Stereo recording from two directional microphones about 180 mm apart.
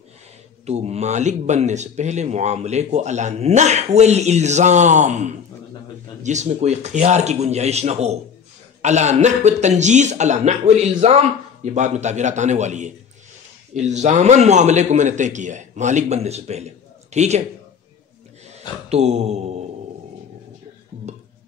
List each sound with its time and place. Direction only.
0.7 s speech: 35° right (ahead or behind)
18.9 s mantra: 35° right (ahead or behind)